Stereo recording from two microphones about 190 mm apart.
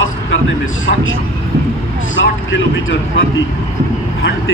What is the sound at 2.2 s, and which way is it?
Speech, 80° left.